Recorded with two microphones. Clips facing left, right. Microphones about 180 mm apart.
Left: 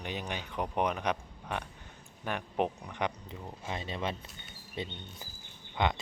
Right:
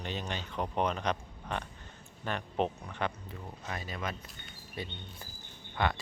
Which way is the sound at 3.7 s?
25° left (ahead or behind).